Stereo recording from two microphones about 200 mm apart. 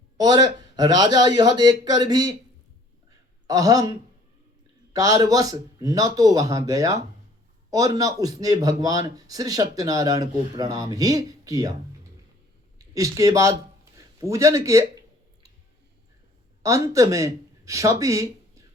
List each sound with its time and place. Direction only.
0.2 s a man's voice: 20° right (ahead or behind)
3.4 s speech: 15° right (ahead or behind)
4.9 s a man's voice: 15° right (ahead or behind)
12.9 s a man's voice: 15° right (ahead or behind)
16.6 s speech: 15° right (ahead or behind)